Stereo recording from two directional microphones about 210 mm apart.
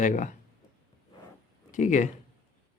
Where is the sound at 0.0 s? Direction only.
35° left (ahead or behind).